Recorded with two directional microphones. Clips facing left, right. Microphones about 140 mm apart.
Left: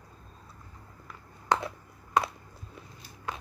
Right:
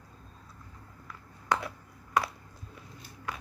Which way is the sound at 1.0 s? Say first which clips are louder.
Even; 25° left (ahead or behind).